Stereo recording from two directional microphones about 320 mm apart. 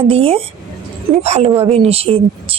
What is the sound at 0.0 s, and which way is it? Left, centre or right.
A woman's voice, centre.